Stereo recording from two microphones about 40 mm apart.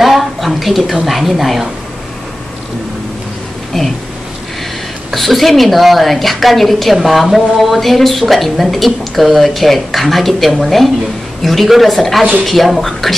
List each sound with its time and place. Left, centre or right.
0.0 s a sound: centre
1.0 s a woman's voice: centre
5.1 s a woman's voice: centre